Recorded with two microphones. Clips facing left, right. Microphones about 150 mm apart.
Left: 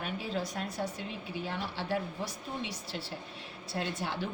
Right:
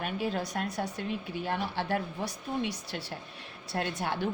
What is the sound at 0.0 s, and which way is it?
A woman's voice, 55° right (ahead or behind).